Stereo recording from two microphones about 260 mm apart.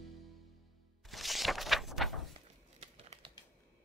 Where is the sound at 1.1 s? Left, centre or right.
Centre.